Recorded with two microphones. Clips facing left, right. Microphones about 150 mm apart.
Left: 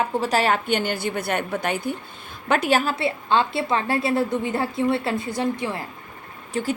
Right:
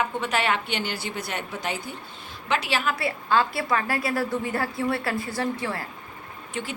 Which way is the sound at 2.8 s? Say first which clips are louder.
Left 3 dB; 25° left (ahead or behind).